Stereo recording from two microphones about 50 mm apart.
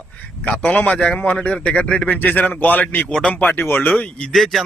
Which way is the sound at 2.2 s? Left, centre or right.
Left.